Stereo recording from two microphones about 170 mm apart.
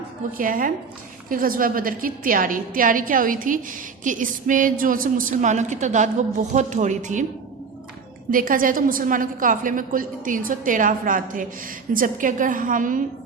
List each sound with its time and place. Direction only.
0.3 s a woman's voice: 55° right (ahead or behind)
8.3 s a woman's voice: 55° right (ahead or behind)